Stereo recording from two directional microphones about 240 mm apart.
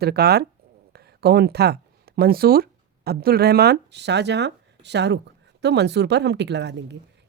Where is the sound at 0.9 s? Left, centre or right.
Right.